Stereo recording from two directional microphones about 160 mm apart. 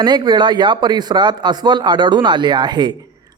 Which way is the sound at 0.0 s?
25° right (ahead or behind).